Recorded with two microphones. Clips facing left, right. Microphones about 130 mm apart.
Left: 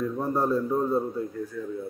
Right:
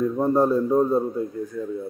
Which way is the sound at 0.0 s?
20° right (ahead or behind).